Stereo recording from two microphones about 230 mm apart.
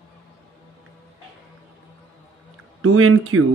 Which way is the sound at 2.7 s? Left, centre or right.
Right.